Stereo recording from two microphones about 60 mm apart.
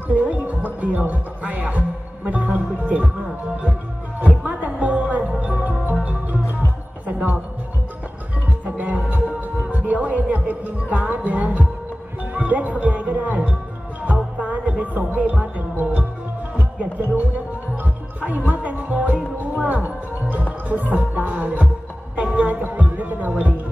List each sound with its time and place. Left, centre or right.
0.1 s music: right
3.0 s speech: centre
4.4 s music: right
8.6 s music: right